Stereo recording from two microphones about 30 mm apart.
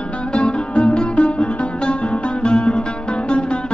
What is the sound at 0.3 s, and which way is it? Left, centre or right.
Music, left.